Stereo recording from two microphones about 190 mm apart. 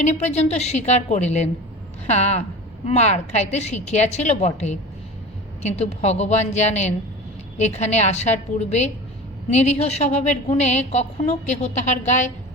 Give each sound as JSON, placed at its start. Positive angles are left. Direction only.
{"t": 0.0, "sound": "a woman's voice", "side_deg": 35}